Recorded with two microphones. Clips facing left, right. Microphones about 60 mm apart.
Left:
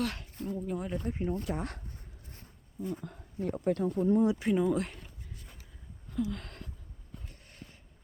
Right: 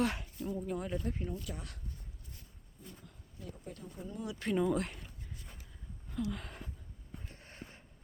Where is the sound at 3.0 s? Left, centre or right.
Left.